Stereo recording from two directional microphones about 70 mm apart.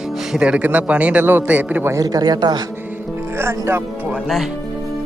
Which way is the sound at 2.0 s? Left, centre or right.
Right.